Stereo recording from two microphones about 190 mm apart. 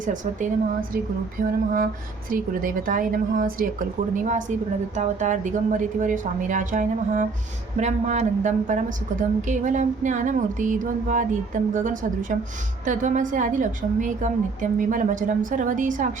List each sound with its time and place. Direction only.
0.0 s a woman's voice: 40° right (ahead or behind)